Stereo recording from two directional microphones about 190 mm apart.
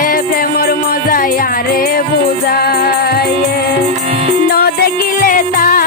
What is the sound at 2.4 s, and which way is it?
Music, 55° left (ahead or behind).